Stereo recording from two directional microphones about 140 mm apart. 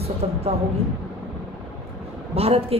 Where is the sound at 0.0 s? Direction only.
45° right (ahead or behind).